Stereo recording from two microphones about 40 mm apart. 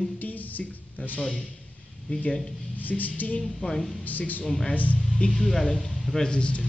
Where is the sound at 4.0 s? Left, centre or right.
Left.